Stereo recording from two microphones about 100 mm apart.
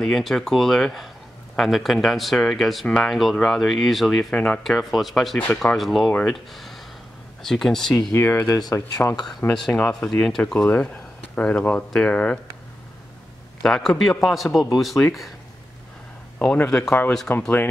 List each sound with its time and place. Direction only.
0.0 s speech: centre (ahead or behind)
8.1 s speech: 25° left (ahead or behind)
8.5 s speech: 40° left (ahead or behind)
9.5 s speech: 5° left (ahead or behind)
13.6 s speech: 5° left (ahead or behind)
16.3 s speech: 10° left (ahead or behind)